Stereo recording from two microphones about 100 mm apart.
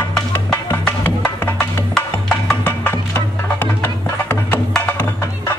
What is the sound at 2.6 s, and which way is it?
Music, 20° left (ahead or behind).